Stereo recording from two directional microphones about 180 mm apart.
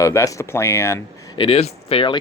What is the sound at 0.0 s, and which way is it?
Speech, 15° left (ahead or behind).